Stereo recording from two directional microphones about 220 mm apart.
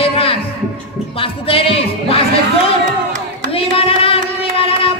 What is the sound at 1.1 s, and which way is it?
Speech, 25° left (ahead or behind).